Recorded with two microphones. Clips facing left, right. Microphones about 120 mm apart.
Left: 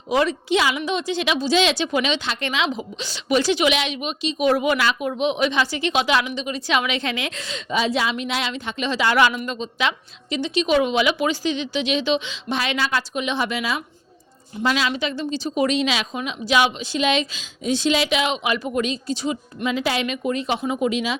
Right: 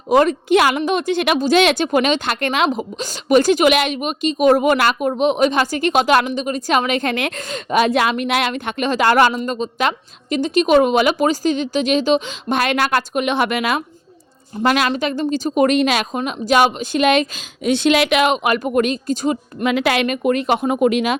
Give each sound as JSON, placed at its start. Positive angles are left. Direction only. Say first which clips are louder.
{"t": 0.1, "sound": "speech", "louder": "right 6 dB", "side_deg": -45}
{"t": 19.6, "sound": "speech", "louder": "right 5 dB", "side_deg": -65}